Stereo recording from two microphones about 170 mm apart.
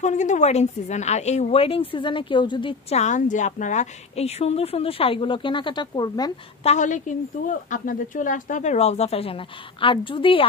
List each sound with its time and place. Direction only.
0.0 s a woman's voice: 45° left (ahead or behind); by 3.0 s 30° left (ahead or behind)
3.0 s a woman's voice: 45° left (ahead or behind); by 6.3 s 25° left (ahead or behind)
6.6 s a woman's voice: 40° left (ahead or behind)